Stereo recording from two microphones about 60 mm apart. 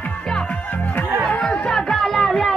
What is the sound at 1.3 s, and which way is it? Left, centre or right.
Music, centre.